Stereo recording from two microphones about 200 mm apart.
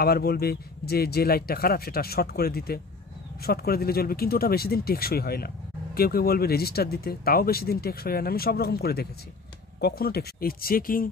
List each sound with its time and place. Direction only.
0.0 s speech: 50° left (ahead or behind)